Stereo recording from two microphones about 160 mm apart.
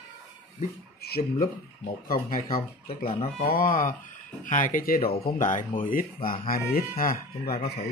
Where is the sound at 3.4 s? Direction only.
65° left (ahead or behind).